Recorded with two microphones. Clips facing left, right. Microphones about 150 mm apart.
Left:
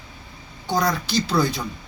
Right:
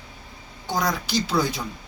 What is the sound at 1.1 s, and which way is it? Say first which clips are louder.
Speech: left 2 dB; 15° right (ahead or behind).